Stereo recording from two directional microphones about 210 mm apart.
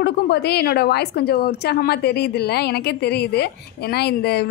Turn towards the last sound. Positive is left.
turn(degrees=50)  # may be behind; listen again after turning